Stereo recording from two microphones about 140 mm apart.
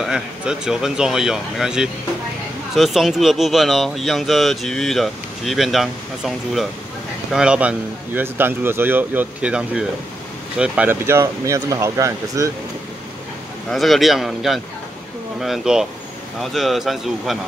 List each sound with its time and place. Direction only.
0.0 s speech: 5° right (ahead or behind); by 12.4 s 20° right (ahead or behind)
13.7 s speech: centre (ahead or behind)